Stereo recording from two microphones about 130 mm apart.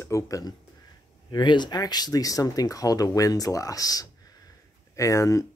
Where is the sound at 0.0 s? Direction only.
25° left (ahead or behind).